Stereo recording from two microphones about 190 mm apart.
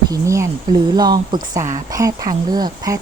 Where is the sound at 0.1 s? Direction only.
15° right (ahead or behind).